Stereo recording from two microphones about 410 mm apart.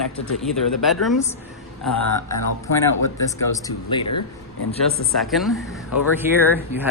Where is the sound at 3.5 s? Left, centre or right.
Centre.